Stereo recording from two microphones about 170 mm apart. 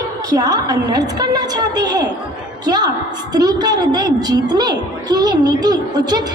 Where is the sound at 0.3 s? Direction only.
25° right (ahead or behind).